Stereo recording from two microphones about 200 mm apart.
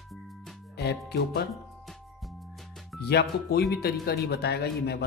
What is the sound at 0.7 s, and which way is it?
Speech, 55° left (ahead or behind).